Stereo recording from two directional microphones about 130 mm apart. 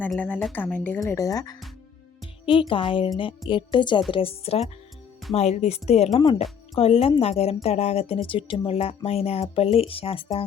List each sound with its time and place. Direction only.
0.2 s speech: 10° left (ahead or behind)
0.9 s speech: 25° left (ahead or behind)
2.5 s a woman's voice: 40° left (ahead or behind)